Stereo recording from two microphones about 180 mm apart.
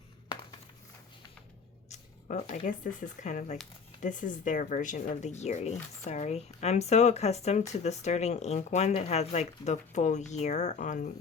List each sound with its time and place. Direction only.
1.9 s speech: 45° left (ahead or behind)